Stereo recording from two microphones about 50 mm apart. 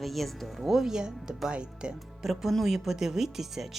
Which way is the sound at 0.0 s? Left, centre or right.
Centre.